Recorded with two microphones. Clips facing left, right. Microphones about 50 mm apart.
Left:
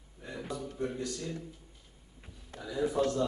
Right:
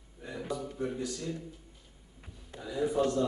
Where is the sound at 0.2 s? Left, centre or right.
Centre.